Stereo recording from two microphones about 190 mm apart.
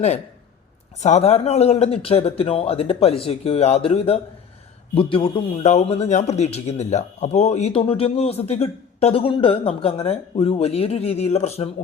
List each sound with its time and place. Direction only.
1.0 s a man's voice: 35° left (ahead or behind)